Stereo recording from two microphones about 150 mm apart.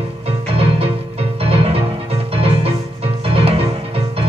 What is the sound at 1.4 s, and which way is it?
Music, 40° right (ahead or behind).